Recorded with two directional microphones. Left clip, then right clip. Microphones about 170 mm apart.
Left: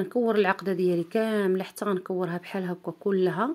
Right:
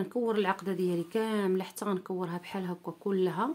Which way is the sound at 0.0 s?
20° left (ahead or behind).